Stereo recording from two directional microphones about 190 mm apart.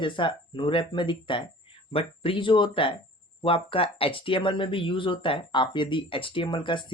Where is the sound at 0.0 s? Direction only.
25° left (ahead or behind).